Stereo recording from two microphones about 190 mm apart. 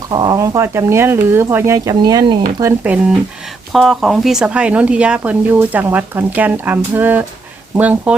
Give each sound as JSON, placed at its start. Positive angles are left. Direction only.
{"t": 0.1, "sound": "speech", "side_deg": -20}
{"t": 2.6, "sound": "speech", "side_deg": -10}
{"t": 3.7, "sound": "speech", "side_deg": 0}